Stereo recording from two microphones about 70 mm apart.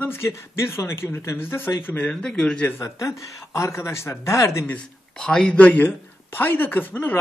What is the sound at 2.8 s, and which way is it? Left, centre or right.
Speech, left.